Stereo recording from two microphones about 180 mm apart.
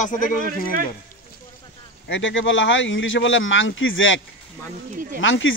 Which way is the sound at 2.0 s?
90° left.